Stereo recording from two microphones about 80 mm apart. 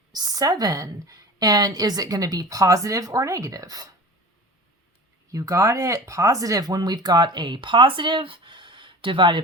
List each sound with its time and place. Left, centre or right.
0.1 s a woman's voice: right
5.3 s speech: right